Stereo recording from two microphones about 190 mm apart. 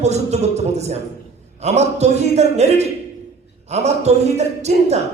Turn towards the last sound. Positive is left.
turn(degrees=-35)  # may be behind; listen again after turning